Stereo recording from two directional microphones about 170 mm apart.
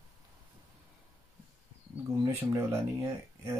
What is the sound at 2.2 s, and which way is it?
Speech, 15° right (ahead or behind).